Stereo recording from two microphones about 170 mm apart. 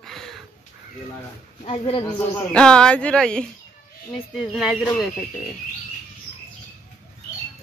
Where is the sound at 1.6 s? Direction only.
35° left (ahead or behind).